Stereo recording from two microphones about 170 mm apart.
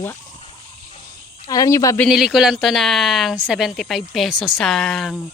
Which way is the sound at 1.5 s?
20° left (ahead or behind).